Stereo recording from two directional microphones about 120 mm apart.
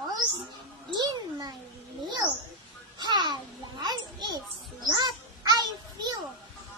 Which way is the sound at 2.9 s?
35° right (ahead or behind).